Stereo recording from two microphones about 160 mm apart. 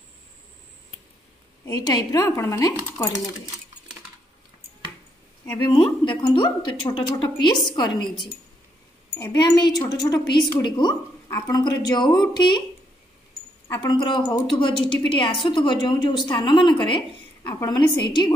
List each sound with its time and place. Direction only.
1.7 s a woman's voice: 25° left (ahead or behind)
5.7 s a woman's voice: 30° left (ahead or behind)
13.7 s a woman's voice: 25° left (ahead or behind)